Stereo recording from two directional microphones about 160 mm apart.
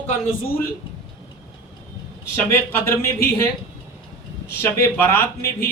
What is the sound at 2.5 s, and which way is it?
Speech, 15° left (ahead or behind).